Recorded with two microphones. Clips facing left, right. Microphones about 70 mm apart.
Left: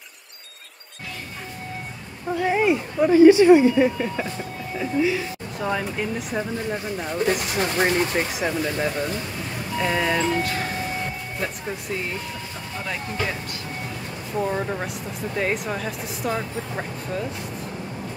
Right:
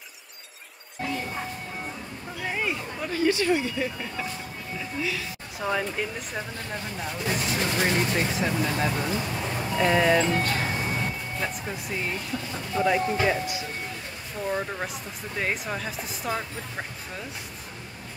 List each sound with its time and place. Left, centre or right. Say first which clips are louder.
2.4 s speech: left 9 dB; centre
5.6 s speech: left 2 dB; centre
7.2 s speech: left 2 dB; left; by 8.5 s centre
8.5 s speech: left 2 dB; centre
12.8 s speech: right 6 dB; centre
14.4 s speech: left 3 dB; centre